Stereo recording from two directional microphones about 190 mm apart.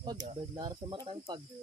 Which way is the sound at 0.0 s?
20° right (ahead or behind).